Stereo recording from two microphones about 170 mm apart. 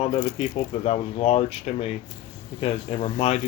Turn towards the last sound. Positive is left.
turn(degrees=35)  # may be behind; listen again after turning